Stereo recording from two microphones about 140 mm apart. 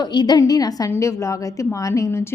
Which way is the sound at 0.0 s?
30° left (ahead or behind).